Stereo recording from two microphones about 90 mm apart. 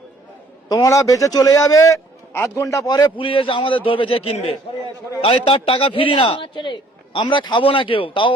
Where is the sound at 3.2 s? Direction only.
75° left (ahead or behind).